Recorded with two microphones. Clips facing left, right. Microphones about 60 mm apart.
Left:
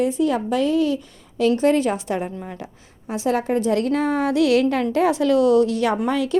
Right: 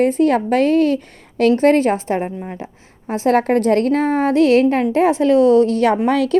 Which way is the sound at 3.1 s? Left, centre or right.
Right.